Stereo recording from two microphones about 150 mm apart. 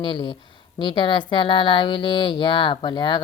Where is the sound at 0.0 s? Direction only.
30° left (ahead or behind).